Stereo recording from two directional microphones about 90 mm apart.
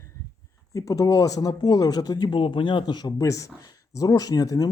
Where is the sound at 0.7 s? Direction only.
40° left (ahead or behind).